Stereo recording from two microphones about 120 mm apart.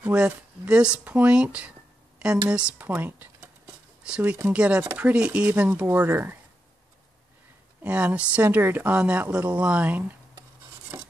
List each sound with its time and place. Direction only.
0.0 s a woman's voice: 10° right (ahead or behind)
7.8 s a woman's voice: 10° right (ahead or behind)
10.9 s stir: 25° right (ahead or behind)